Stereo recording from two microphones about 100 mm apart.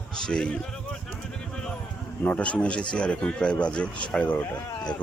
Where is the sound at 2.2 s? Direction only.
15° left (ahead or behind).